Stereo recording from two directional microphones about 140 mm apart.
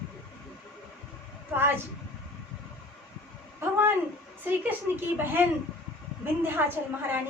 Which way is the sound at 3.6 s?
15° right (ahead or behind).